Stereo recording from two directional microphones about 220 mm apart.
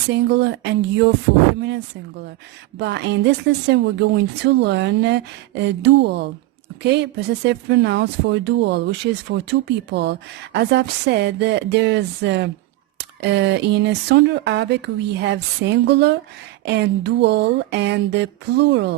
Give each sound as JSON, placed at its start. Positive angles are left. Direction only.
{"t": 0.1, "sound": "speech", "side_deg": -50}
{"t": 2.7, "sound": "speech", "side_deg": -50}